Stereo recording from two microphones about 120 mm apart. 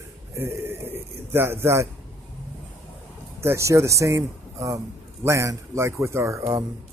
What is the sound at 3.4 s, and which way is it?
Speech, 25° right (ahead or behind).